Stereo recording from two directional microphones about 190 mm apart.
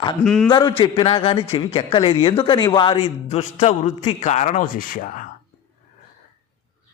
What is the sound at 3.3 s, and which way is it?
A man's voice, 35° left (ahead or behind).